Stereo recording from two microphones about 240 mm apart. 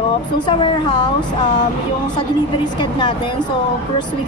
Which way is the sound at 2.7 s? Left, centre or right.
Centre.